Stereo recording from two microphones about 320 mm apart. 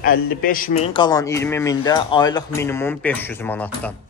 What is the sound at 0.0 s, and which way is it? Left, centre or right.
A man's voice, left.